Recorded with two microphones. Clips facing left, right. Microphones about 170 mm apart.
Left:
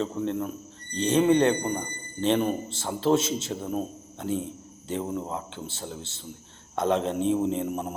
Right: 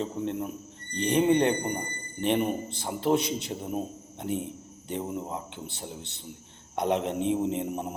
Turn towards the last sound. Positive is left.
turn(degrees=-20)  # may be behind; listen again after turning